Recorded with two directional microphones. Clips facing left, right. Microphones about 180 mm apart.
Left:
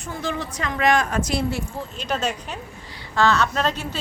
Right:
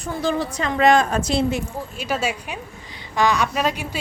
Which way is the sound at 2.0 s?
10° right (ahead or behind).